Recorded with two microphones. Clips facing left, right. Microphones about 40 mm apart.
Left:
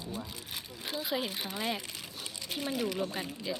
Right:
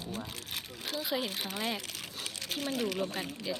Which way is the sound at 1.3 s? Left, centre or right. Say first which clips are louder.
Even; right.